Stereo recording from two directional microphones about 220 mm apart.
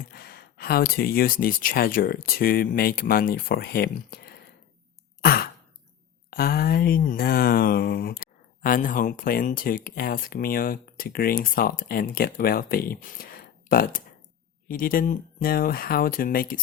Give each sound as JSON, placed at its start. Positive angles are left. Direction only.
{"t": 0.1, "sound": "speech", "side_deg": 45}
{"t": 5.2, "sound": "sigh", "side_deg": 45}
{"t": 6.3, "sound": "speech", "side_deg": 45}